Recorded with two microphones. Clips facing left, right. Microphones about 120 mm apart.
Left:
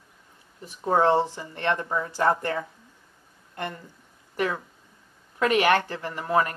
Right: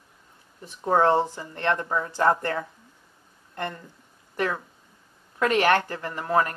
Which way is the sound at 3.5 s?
15° left (ahead or behind).